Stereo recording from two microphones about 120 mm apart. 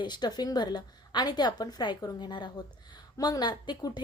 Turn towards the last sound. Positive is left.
turn(degrees=35)  # may be behind; listen again after turning